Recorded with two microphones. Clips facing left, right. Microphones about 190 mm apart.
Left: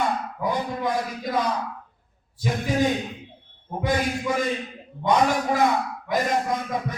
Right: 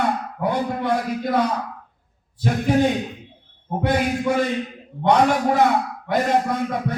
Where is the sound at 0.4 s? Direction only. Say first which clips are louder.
Right 4 dB; 60° right (ahead or behind).